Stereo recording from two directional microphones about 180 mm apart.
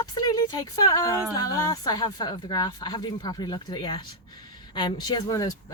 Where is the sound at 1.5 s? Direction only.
20° left (ahead or behind).